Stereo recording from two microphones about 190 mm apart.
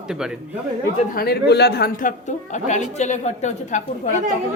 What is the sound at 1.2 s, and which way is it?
Speech, 55° left (ahead or behind).